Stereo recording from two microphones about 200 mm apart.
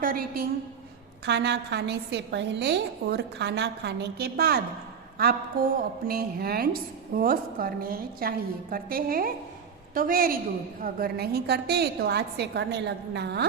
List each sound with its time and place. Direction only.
0.0 s a woman's voice: 45° right (ahead or behind)
1.2 s a woman's voice: 55° right (ahead or behind)